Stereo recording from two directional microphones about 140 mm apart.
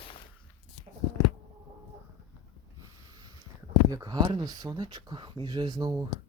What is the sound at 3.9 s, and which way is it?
Speech, 25° right (ahead or behind).